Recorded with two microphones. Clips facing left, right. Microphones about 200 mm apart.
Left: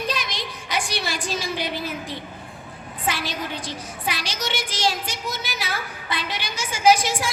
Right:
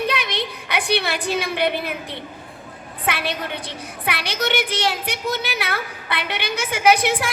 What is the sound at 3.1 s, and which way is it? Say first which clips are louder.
A woman's voice: right 2 dB; 60° right (ahead or behind).